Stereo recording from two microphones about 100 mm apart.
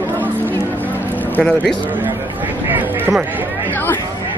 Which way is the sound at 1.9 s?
20° right (ahead or behind).